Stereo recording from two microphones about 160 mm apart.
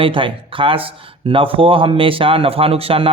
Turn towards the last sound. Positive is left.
turn(degrees=-35)  # may be behind; listen again after turning